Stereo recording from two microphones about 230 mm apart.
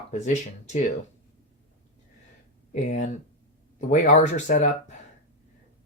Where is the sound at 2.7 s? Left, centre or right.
Left.